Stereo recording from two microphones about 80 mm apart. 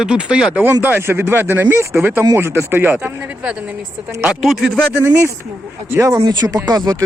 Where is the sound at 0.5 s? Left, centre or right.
Right.